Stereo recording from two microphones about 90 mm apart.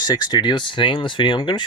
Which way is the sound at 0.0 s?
50° left (ahead or behind).